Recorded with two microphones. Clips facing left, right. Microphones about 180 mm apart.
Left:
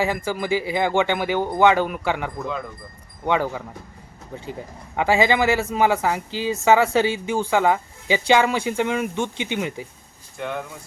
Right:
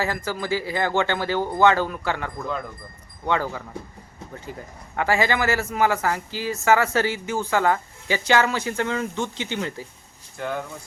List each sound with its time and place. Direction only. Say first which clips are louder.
0.3 s a man's voice: left 3 dB; 15° left (ahead or behind)
2.4 s speech: left 1 dB; centre (ahead or behind)
3.2 s a man's voice: left 3 dB; 15° left (ahead or behind)
4.9 s a man's voice: left 3 dB; 20° left (ahead or behind)
10.3 s speech: even; centre (ahead or behind)